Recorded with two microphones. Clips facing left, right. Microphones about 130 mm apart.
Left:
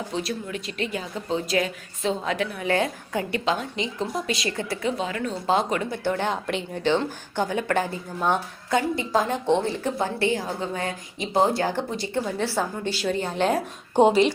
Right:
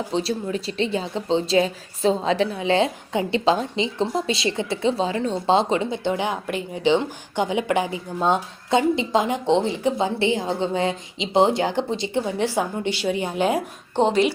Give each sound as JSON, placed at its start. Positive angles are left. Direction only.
{"t": 0.1, "sound": "speech", "side_deg": -30}
{"t": 6.3, "sound": "a woman's voice", "side_deg": -5}
{"t": 6.8, "sound": "speech", "side_deg": -15}
{"t": 13.9, "sound": "speech", "side_deg": 10}